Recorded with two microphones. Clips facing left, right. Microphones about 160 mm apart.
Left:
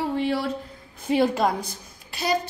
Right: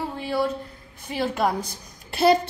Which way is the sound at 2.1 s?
60° right (ahead or behind).